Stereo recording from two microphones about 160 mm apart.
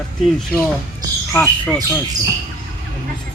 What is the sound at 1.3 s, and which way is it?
Speech, 10° left (ahead or behind).